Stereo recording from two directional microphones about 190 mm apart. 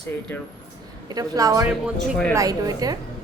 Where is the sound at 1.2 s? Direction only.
20° right (ahead or behind).